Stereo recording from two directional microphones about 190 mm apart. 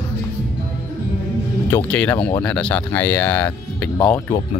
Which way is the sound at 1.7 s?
10° left (ahead or behind).